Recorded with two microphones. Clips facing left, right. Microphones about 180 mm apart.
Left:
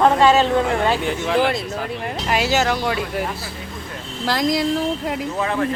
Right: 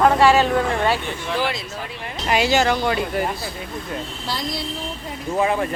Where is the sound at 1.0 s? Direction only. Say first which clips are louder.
Left 6 dB; 80° left.